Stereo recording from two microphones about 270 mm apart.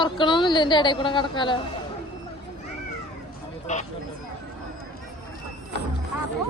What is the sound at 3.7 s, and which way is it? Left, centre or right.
Speech, left.